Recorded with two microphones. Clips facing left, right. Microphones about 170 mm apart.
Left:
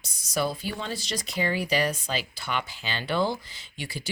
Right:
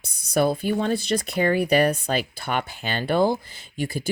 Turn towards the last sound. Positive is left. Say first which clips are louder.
# right 9 dB
turn(degrees=-50)  # may be behind; listen again after turning